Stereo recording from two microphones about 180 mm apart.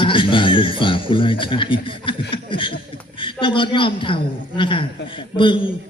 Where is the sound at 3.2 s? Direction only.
25° left (ahead or behind).